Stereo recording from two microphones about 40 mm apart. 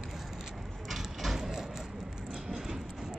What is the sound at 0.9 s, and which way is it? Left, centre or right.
Vehicle, centre.